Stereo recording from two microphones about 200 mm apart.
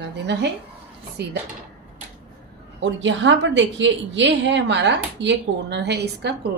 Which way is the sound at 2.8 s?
65° right (ahead or behind).